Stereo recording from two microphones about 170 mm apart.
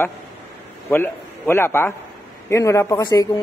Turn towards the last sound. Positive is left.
turn(degrees=20)  # may be behind; listen again after turning